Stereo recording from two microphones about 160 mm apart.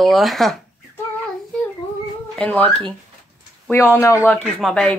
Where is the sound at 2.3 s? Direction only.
10° left (ahead or behind).